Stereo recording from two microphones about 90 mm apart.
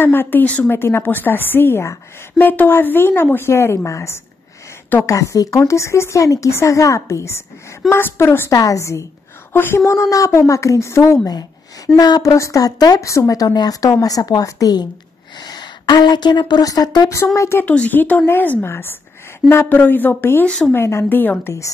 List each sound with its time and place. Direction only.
0.0 s a woman's voice: 25° left (ahead or behind)
8.5 s a woman's voice: 40° left (ahead or behind)
9.5 s a woman's voice: 25° left (ahead or behind)
11.2 s a woman's voice: 45° left (ahead or behind)
17.1 s a woman's voice: 35° left (ahead or behind)
17.6 s a woman's voice: 20° left (ahead or behind)
20.4 s speech: 10° left (ahead or behind)
20.7 s a woman's voice: 30° left (ahead or behind)